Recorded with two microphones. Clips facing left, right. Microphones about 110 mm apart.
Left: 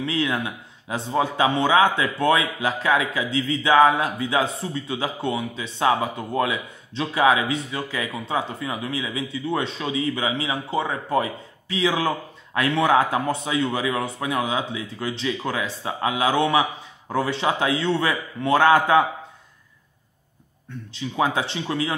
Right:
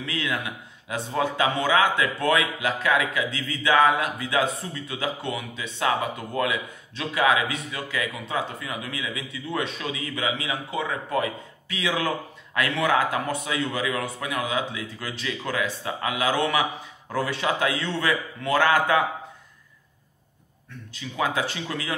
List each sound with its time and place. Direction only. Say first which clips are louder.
0.0 s a man's voice: left 5 dB; 25° left (ahead or behind)
20.9 s a man's voice: left 4 dB; 30° left (ahead or behind)